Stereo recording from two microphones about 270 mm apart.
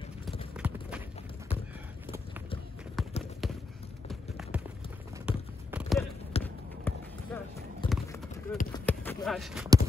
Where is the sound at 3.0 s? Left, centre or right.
Centre.